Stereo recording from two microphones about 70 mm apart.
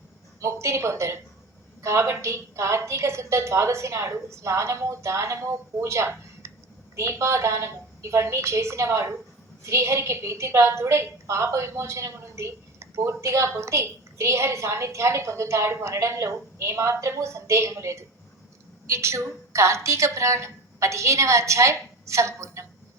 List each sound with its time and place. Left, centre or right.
0.3 s a woman's voice: right